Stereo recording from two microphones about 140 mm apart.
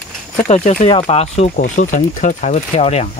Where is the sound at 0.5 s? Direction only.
50° left (ahead or behind).